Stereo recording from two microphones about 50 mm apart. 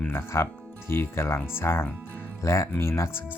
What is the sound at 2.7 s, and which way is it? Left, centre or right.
Speech, left.